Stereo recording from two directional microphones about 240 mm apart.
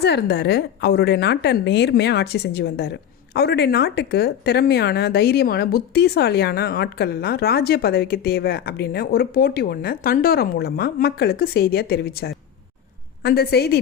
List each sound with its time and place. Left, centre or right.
0.0 s a woman's voice: left